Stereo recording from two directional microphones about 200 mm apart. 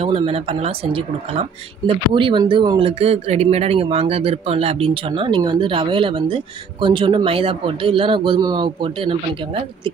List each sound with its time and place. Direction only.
0.0 s speech: 30° right (ahead or behind)